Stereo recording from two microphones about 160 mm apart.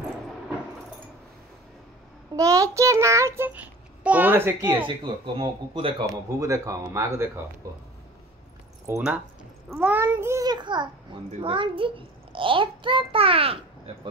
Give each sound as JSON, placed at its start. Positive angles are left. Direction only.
{"t": 2.3, "sound": "a child's voice", "side_deg": -20}
{"t": 4.8, "sound": "a child's voice", "side_deg": -30}
{"t": 6.0, "sound": "speech", "side_deg": -20}
{"t": 8.8, "sound": "a child's voice", "side_deg": -15}